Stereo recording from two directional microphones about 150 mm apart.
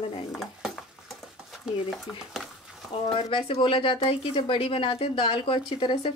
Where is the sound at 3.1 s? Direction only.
40° left (ahead or behind).